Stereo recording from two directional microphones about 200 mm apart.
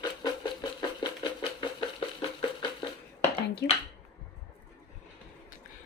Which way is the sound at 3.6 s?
50° left (ahead or behind).